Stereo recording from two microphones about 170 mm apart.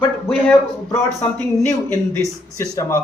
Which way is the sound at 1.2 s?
15° left (ahead or behind).